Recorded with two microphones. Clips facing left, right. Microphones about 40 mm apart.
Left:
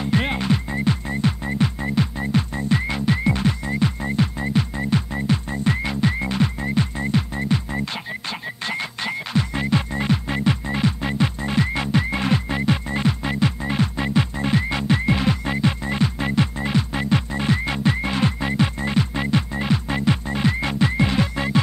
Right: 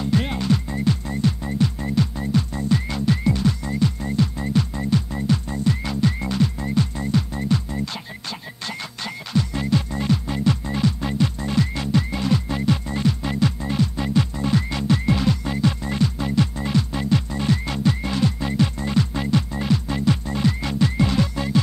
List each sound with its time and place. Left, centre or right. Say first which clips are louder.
0.0 s music: left 1 dB; left